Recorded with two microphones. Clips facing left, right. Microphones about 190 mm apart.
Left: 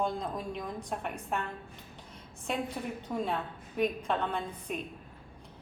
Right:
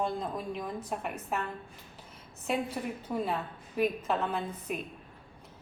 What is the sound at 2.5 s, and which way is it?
A woman's voice, 5° right (ahead or behind).